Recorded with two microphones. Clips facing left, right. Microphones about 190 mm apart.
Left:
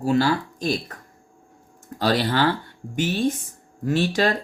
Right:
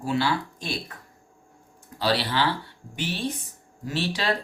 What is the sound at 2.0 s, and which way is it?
Speech, 45° left (ahead or behind).